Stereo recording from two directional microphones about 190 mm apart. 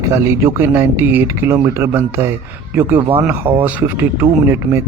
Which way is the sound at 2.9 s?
30° right (ahead or behind).